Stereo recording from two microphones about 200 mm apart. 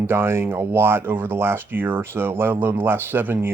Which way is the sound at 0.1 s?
10° right (ahead or behind).